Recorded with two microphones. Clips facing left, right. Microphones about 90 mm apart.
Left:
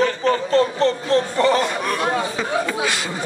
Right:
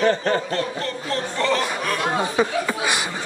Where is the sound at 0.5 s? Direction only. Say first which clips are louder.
Left 8 dB; 30° left (ahead or behind).